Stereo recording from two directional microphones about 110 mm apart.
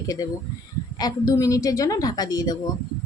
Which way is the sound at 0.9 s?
35° left (ahead or behind).